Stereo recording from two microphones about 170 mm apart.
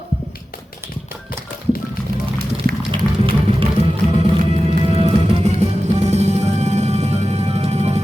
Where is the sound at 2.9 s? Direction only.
30° right (ahead or behind).